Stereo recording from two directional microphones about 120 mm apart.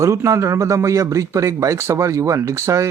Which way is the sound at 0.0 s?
25° right (ahead or behind).